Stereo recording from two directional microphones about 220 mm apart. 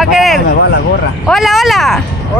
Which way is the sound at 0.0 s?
Centre (ahead or behind).